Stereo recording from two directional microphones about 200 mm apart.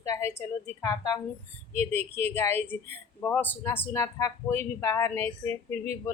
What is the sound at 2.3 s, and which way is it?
Speech, 10° left (ahead or behind).